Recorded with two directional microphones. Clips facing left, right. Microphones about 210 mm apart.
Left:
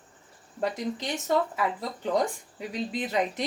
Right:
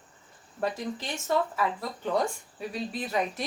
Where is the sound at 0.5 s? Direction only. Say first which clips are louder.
Left 1 dB; 15° left (ahead or behind).